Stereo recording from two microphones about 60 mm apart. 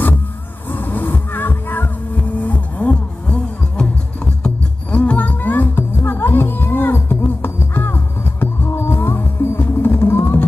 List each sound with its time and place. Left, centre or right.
0.7 s music: left
4.9 s music: left